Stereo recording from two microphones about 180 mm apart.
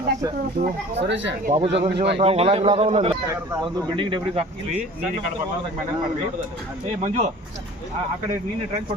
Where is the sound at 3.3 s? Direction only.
15° right (ahead or behind).